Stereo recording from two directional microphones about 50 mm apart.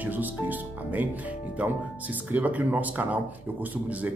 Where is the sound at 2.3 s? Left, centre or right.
Right.